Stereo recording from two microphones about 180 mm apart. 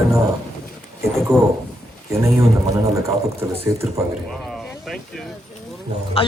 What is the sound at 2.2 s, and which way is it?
Speech, 15° right (ahead or behind).